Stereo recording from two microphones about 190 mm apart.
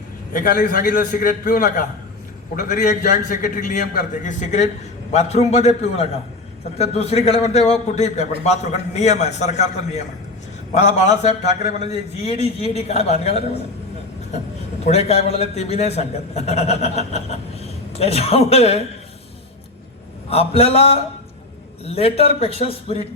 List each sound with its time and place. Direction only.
0.3 s a man's voice: 50° left (ahead or behind)
14.8 s a man's voice: 35° left (ahead or behind)
20.3 s a man's voice: 30° left (ahead or behind)